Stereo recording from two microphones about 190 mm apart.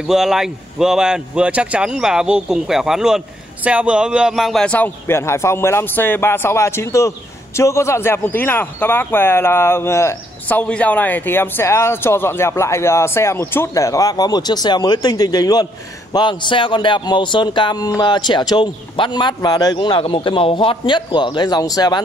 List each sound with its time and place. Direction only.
0.0 s a man's voice: 5° right (ahead or behind); by 22.0 s 20° left (ahead or behind)